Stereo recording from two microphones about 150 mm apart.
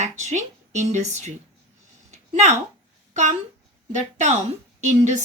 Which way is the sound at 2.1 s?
50° right (ahead or behind).